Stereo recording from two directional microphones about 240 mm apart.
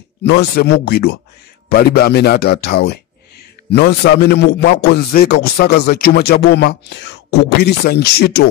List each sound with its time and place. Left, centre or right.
0.2 s a man's voice: left